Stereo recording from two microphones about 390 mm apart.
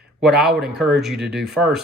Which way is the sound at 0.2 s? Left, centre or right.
Centre.